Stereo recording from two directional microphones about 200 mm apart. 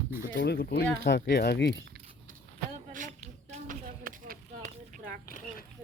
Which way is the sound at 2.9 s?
40° right (ahead or behind).